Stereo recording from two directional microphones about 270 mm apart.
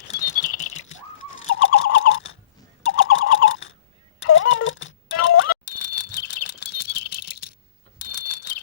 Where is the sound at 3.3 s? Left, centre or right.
Left.